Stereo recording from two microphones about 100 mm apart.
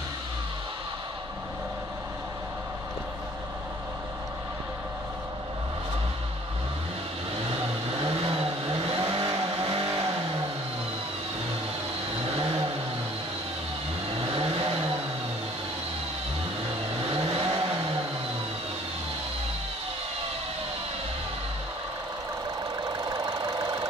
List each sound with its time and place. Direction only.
8.0 s vehicle: 60° right (ahead or behind)
9.7 s vehicle: 60° right (ahead or behind)
14.3 s vehicle: 65° right (ahead or behind)
17.3 s vehicle: 55° right (ahead or behind)
22.8 s engine: 45° right (ahead or behind)